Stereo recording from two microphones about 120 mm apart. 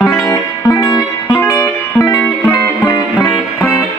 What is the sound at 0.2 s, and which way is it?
Music, 25° left (ahead or behind).